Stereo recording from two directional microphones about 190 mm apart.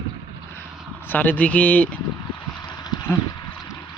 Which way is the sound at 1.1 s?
10° left (ahead or behind).